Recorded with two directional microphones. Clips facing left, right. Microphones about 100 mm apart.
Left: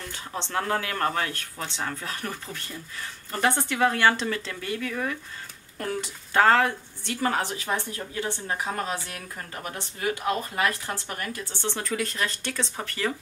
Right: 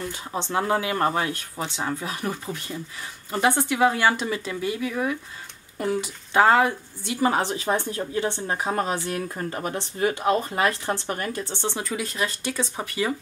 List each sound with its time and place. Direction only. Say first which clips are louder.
0.0 s speech: right 5 dB; 10° right (ahead or behind)
11.7 s speech: even; 10° right (ahead or behind)